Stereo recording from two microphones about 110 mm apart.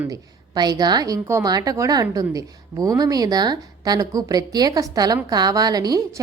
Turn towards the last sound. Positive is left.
turn(degrees=-35)  # may be behind; listen again after turning